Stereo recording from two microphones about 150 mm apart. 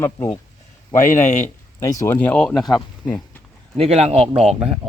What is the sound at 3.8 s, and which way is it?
Speech, 45° right (ahead or behind).